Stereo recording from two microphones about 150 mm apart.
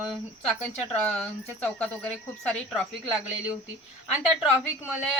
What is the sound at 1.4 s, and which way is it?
Speech, 10° left (ahead or behind).